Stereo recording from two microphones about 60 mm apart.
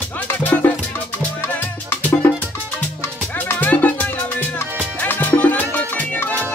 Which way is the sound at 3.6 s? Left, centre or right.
Left.